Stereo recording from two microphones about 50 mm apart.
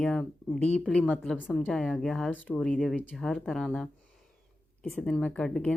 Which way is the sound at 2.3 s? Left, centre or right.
Left.